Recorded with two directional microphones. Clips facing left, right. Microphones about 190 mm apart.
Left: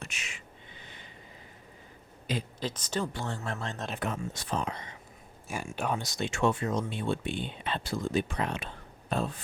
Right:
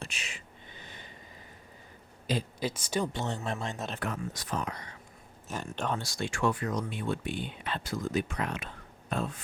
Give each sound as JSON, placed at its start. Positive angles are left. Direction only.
{"t": 0.0, "sound": "a sound", "side_deg": -30}
{"t": 2.6, "sound": "speech", "side_deg": -10}
{"t": 3.1, "sound": "speech", "side_deg": -20}
{"t": 4.0, "sound": "speech", "side_deg": 25}
{"t": 5.5, "sound": "speech", "side_deg": 10}